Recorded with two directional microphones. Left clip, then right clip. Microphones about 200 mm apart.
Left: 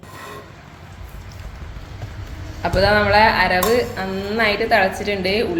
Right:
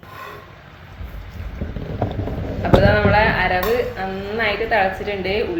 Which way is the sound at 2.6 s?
35° left (ahead or behind).